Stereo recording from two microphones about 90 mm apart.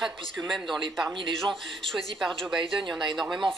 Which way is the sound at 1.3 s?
5° left (ahead or behind).